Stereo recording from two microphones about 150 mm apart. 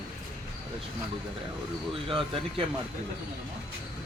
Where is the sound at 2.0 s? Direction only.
35° right (ahead or behind).